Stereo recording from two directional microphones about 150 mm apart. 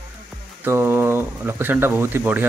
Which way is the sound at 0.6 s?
15° right (ahead or behind).